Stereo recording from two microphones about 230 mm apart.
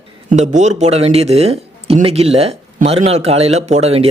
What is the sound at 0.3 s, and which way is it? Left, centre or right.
Speech, right.